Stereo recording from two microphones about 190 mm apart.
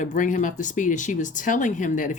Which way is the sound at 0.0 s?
40° left (ahead or behind).